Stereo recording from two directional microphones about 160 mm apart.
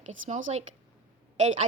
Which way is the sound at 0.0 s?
50° right (ahead or behind).